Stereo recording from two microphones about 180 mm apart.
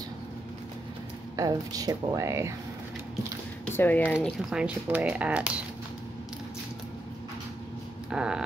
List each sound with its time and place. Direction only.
1.3 s speech: 20° right (ahead or behind)
3.7 s speech: 10° left (ahead or behind)
4.5 s speech: 5° right (ahead or behind)
8.1 s a sound: 5° right (ahead or behind)